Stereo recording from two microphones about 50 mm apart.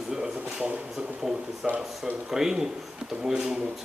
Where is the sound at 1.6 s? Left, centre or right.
Centre.